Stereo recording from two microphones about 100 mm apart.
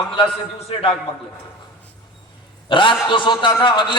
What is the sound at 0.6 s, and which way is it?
Speech, 80° left.